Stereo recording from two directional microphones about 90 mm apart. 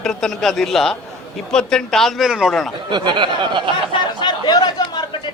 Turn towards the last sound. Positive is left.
turn(degrees=50)  # may be behind; listen again after turning